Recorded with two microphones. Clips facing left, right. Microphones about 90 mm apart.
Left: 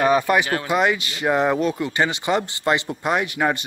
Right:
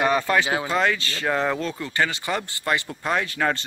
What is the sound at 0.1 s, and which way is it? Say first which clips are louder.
Speech: left 3 dB; 15° left (ahead or behind).